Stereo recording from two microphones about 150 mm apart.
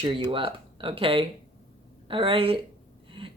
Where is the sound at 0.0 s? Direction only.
35° right (ahead or behind).